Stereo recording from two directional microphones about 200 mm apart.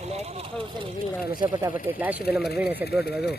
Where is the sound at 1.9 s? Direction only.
5° right (ahead or behind).